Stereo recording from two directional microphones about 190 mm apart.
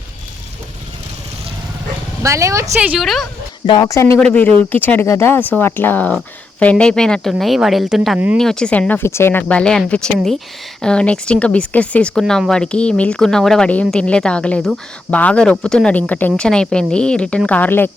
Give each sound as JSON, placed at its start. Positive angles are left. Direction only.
{"t": 2.2, "sound": "speech", "side_deg": -15}
{"t": 3.0, "sound": "speech", "side_deg": 0}
{"t": 3.7, "sound": "speech", "side_deg": 20}